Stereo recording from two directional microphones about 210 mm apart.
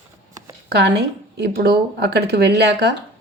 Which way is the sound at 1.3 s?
50° right (ahead or behind).